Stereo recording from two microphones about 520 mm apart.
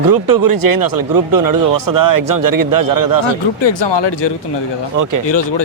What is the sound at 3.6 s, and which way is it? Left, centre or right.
Speech, left.